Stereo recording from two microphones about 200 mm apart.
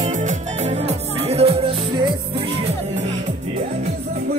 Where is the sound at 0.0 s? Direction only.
35° right (ahead or behind).